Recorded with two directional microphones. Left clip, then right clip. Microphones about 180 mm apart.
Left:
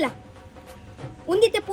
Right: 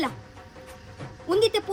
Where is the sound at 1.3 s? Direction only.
15° right (ahead or behind).